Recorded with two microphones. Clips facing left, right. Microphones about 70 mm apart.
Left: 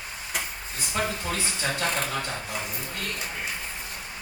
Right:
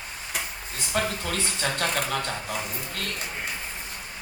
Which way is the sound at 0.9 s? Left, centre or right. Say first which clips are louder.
Right 1 dB; right.